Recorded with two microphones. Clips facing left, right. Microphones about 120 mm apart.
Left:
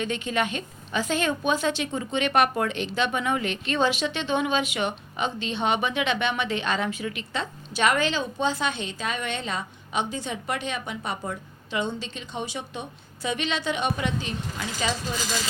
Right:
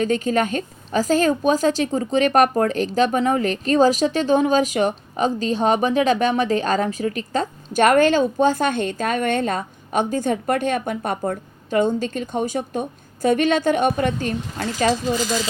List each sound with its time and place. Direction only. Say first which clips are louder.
0.0 s a woman's voice: right 7 dB; 40° right (ahead or behind)